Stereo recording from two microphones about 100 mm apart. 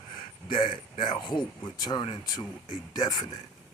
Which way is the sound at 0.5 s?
55° left (ahead or behind).